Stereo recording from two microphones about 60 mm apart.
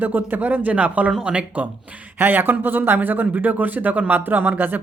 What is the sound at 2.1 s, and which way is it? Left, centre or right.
Speech, right.